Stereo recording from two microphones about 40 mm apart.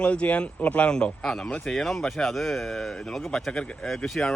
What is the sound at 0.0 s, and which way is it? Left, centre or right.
Speech, left.